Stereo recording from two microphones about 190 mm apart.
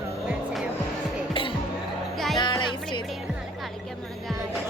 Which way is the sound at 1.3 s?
25° left (ahead or behind).